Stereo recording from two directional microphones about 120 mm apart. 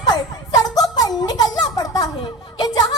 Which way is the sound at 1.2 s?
30° left (ahead or behind).